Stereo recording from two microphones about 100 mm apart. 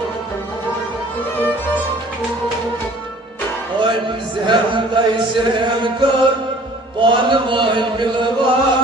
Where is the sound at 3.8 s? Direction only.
55° right (ahead or behind).